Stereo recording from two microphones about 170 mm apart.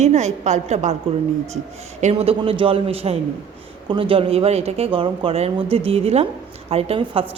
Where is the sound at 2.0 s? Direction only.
35° right (ahead or behind).